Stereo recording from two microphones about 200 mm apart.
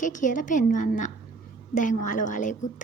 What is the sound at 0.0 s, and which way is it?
A woman's voice, 40° left (ahead or behind).